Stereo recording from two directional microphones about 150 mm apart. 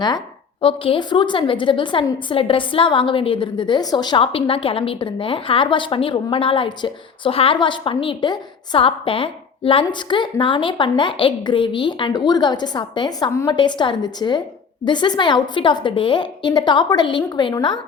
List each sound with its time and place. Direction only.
0.6 s a woman's voice: 40° left (ahead or behind)